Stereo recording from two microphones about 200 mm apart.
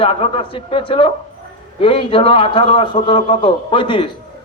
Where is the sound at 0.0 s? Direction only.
30° left (ahead or behind).